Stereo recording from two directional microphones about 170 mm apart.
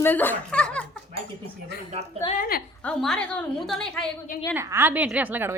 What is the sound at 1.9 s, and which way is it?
Speech, 40° right (ahead or behind).